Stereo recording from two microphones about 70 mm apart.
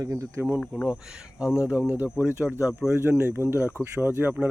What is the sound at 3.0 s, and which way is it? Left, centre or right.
Speech, right.